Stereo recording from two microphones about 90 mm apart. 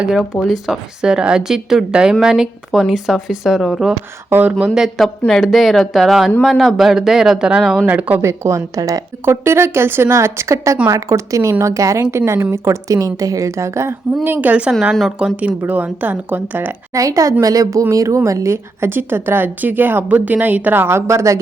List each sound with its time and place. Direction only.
0.0 s a woman's voice: 5° right (ahead or behind)
4.3 s speech: 20° right (ahead or behind)
4.7 s a woman's voice: centre (ahead or behind); by 8.2 s 15° right (ahead or behind)
8.2 s a woman's voice: 30° right (ahead or behind)
14.3 s a woman's voice: 20° right (ahead or behind)
16.9 s a woman's voice: 40° right (ahead or behind)